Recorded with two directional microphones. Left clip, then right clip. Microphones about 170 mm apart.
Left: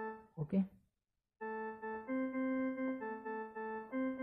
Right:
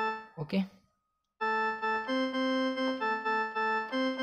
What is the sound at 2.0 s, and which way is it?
Organ, 60° right (ahead or behind).